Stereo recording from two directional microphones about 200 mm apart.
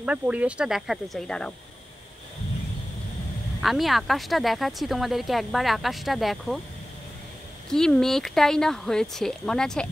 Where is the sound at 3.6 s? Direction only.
Centre (ahead or behind).